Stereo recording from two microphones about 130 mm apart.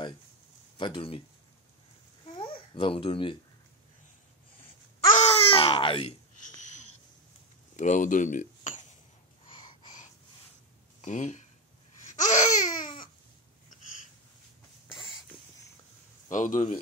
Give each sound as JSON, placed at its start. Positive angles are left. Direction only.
{"t": 0.7, "sound": "speech", "side_deg": 40}
{"t": 2.2, "sound": "babbling", "side_deg": 40}
{"t": 5.1, "sound": "babbling", "side_deg": 50}
{"t": 6.3, "sound": "a sound", "side_deg": 75}
{"t": 7.7, "sound": "speech", "side_deg": 70}
{"t": 11.1, "sound": "speech", "side_deg": 70}
{"t": 12.2, "sound": "babbling", "side_deg": 70}
{"t": 16.3, "sound": "speech", "side_deg": 85}